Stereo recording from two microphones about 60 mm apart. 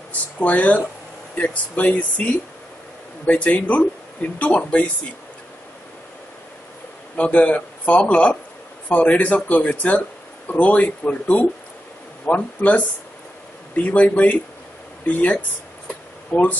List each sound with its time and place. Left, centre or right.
0.4 s speech: left
7.2 s a man's voice: left
13.8 s speech: left
15.9 s a sound: left